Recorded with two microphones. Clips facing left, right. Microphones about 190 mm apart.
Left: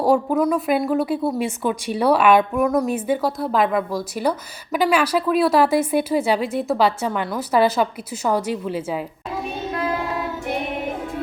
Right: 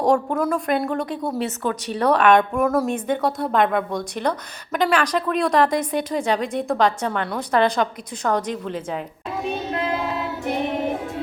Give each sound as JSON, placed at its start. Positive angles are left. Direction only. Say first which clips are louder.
{"t": 0.0, "sound": "a woman's voice", "louder": "left 2 dB", "side_deg": 5}